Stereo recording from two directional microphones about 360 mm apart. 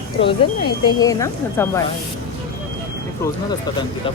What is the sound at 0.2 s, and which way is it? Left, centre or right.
Speech, centre.